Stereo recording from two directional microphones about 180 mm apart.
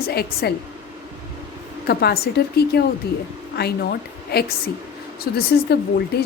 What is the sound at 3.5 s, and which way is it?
Speech, 60° left (ahead or behind).